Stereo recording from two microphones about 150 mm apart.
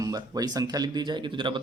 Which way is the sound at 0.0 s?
25° right (ahead or behind).